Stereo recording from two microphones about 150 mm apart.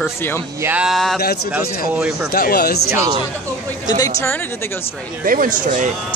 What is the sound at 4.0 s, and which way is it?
Speech, 15° left (ahead or behind).